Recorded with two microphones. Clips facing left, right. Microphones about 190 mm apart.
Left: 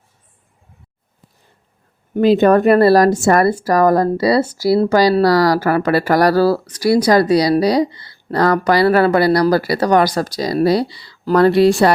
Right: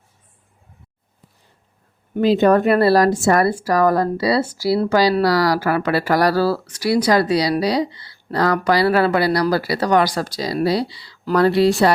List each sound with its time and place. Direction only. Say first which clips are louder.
2.1 s speech: left 3 dB; 55° left (ahead or behind)